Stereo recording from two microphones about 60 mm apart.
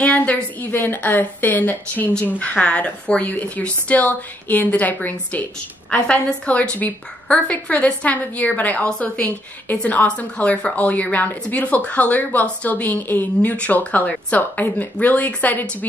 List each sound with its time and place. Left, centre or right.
0.0 s a woman's voice: left
5.9 s a woman's voice: centre